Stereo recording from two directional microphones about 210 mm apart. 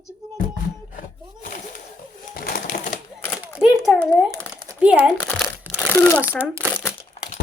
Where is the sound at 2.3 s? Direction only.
45° left (ahead or behind).